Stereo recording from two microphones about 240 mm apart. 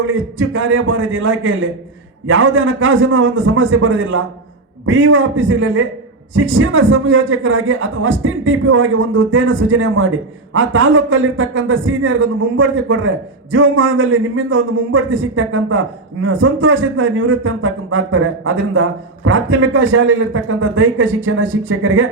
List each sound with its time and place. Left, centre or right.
0.0 s a man's voice: right